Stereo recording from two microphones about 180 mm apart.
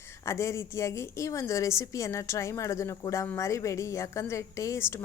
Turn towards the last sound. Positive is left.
turn(degrees=15)  # may be behind; listen again after turning